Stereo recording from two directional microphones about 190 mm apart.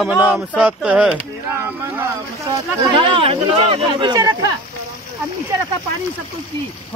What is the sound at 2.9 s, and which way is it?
Speech, 25° right (ahead or behind).